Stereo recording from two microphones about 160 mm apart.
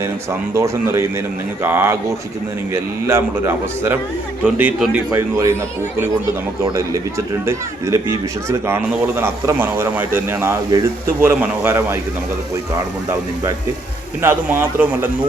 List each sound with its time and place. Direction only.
0.5 s speech: 15° right (ahead or behind)
7.4 s speech: 20° right (ahead or behind)
14.2 s speech: 15° right (ahead or behind)